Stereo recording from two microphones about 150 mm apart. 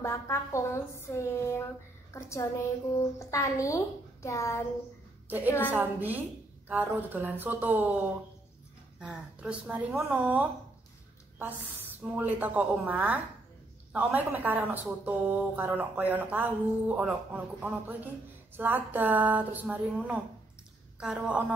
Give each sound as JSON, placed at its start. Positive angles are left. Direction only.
{"t": 0.0, "sound": "a woman's voice", "side_deg": 20}
{"t": 5.7, "sound": "speech", "side_deg": -10}
{"t": 9.0, "sound": "speech", "side_deg": -5}